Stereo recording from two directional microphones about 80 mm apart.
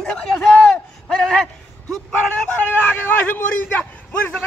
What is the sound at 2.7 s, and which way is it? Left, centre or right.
Vehicle, left.